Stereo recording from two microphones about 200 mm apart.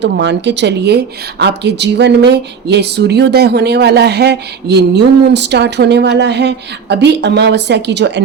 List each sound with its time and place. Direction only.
0.0 s a woman's voice: 60° right (ahead or behind)